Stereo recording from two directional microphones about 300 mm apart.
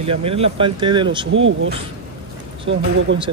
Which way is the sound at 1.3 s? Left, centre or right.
Right.